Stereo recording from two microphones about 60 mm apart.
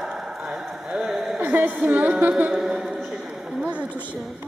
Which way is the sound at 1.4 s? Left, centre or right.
Right.